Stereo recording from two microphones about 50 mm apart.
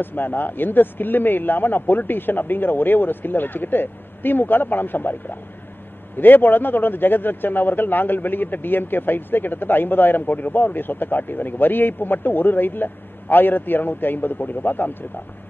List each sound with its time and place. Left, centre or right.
0.0 s a man's voice: left